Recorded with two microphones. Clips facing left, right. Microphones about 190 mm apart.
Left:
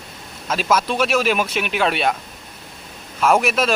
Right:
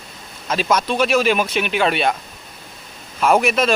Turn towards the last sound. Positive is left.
turn(degrees=0)  # may be behind; listen again after turning